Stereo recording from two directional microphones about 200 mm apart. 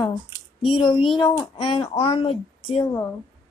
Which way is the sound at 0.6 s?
25° left (ahead or behind).